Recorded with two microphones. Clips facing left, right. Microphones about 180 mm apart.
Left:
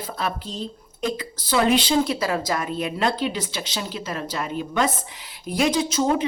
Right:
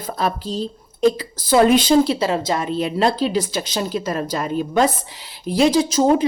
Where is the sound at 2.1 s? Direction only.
25° right (ahead or behind).